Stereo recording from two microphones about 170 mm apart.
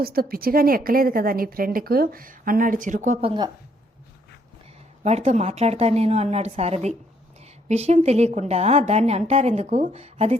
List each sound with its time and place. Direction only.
0.0 s a woman's voice: 60° right (ahead or behind); by 3.4 s 35° right (ahead or behind)
5.0 s a woman's voice: 40° right (ahead or behind)